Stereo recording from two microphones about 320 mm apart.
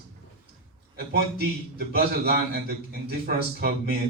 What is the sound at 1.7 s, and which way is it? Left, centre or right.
Speech, right.